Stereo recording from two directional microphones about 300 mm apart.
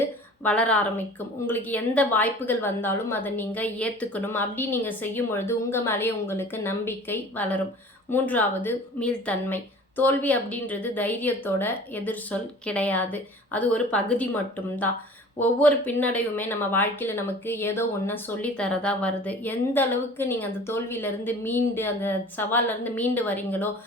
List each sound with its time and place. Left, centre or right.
0.4 s a woman's voice: centre
15.4 s a woman's voice: centre